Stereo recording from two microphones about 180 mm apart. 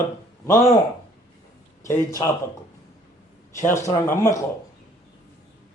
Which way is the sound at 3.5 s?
15° left (ahead or behind).